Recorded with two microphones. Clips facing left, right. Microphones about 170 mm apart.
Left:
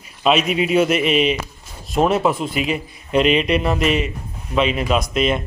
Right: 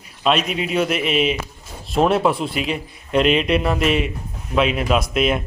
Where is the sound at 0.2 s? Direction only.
5° left (ahead or behind).